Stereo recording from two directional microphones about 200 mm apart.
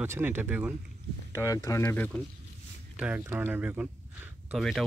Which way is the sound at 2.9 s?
5° right (ahead or behind).